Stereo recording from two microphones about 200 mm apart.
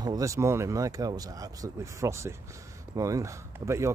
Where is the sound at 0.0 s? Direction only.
15° right (ahead or behind).